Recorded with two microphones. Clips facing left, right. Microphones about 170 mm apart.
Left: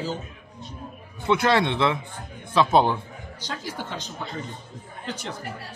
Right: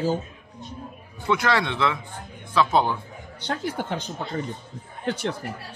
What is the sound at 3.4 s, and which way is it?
Speech, 60° right (ahead or behind).